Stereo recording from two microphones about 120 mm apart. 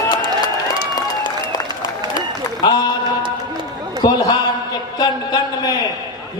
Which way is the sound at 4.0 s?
30° left (ahead or behind).